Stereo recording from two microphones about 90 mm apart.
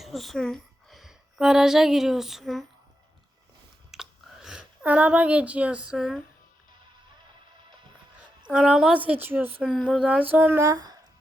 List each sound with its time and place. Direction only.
0.0 s a woman's voice: centre (ahead or behind)
3.9 s a sound: 5° right (ahead or behind)
8.4 s a woman's voice: 10° right (ahead or behind)
9.0 s a woman's voice: 20° right (ahead or behind)
9.8 s a woman's voice: 10° right (ahead or behind)
10.2 s a woman's voice: 20° right (ahead or behind)
10.7 s speech: 45° right (ahead or behind)